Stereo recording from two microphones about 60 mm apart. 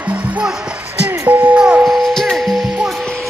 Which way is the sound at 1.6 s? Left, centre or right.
Centre.